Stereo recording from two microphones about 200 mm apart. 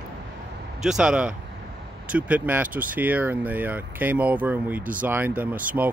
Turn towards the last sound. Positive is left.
turn(degrees=-10)  # may be behind; listen again after turning